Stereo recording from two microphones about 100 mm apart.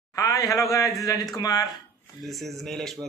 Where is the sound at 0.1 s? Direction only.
35° left (ahead or behind).